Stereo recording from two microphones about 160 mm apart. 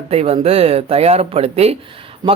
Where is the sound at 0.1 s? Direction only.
40° right (ahead or behind).